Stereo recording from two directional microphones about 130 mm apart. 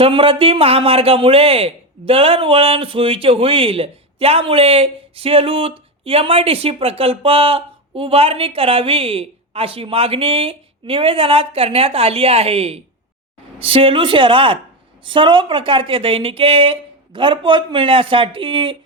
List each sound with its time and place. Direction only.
0.0 s speech: 45° right (ahead or behind)